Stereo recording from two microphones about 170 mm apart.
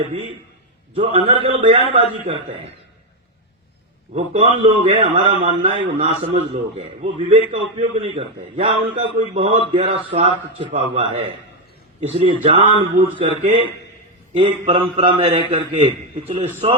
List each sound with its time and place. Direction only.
0.9 s a man's voice: 35° right (ahead or behind)
4.1 s a man's voice: 35° right (ahead or behind)